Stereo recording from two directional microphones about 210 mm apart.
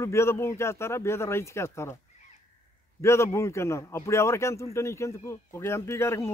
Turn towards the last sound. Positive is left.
turn(degrees=15)  # may be behind; listen again after turning